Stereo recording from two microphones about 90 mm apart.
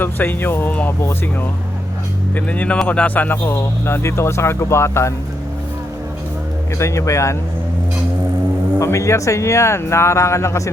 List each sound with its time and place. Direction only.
0.0 s speech: 25° left (ahead or behind)
2.3 s speech: 15° left (ahead or behind)
6.7 s speech: 35° left (ahead or behind)
8.8 s speech: 35° left (ahead or behind)